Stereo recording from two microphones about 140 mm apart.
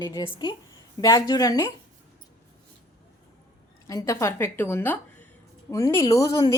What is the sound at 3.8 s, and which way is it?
A woman's voice, 20° left (ahead or behind).